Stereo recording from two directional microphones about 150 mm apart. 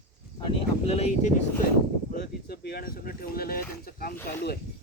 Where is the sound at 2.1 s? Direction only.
90° left.